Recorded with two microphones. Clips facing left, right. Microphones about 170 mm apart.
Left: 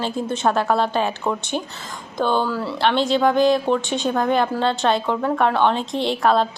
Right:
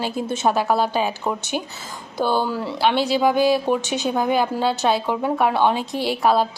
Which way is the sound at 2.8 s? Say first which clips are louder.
Even; 5° right (ahead or behind).